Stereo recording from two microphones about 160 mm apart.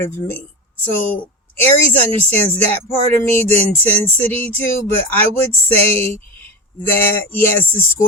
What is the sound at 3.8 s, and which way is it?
Speech, 10° left (ahead or behind).